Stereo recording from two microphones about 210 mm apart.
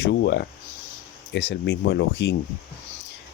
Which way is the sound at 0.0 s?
55° left (ahead or behind).